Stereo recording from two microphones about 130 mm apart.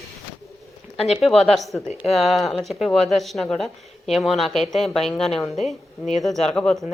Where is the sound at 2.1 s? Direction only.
Centre (ahead or behind).